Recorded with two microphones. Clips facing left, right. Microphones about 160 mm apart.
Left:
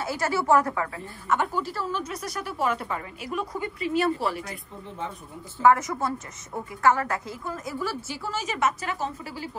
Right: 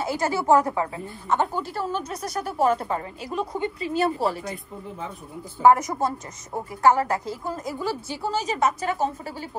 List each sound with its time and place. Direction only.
0.0 s a woman's voice: 20° right (ahead or behind)
1.6 s a woman's voice: 50° right (ahead or behind); by 4.5 s 35° right (ahead or behind)
5.7 s a woman's voice: 20° right (ahead or behind)
8.3 s a woman's voice: 35° right (ahead or behind)